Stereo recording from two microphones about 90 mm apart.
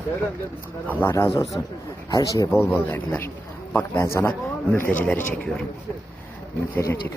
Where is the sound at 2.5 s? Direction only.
25° left (ahead or behind).